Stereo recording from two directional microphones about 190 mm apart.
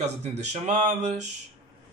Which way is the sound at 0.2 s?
35° right (ahead or behind).